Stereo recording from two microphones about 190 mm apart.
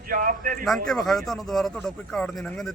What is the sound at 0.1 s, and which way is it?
Speech, 45° right (ahead or behind).